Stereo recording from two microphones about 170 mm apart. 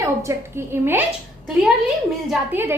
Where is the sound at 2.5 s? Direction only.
10° right (ahead or behind).